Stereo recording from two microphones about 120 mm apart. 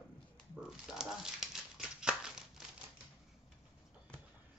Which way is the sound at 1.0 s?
5° right (ahead or behind).